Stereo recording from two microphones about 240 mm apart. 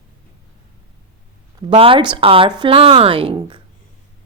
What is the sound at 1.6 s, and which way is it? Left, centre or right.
Speech, right.